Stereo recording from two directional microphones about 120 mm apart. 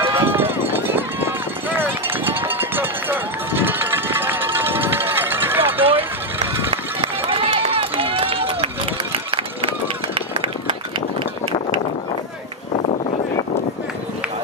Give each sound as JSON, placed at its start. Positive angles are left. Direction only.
{"t": 0.1, "sound": "run", "side_deg": -20}
{"t": 6.7, "sound": "run", "side_deg": -50}